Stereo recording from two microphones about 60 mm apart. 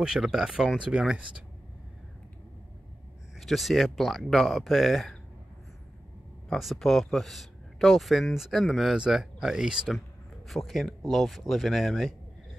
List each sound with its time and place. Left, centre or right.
0.0 s speech: centre
3.3 s speech: centre
6.5 s speech: centre
8.9 s speech: centre
10.5 s speech: centre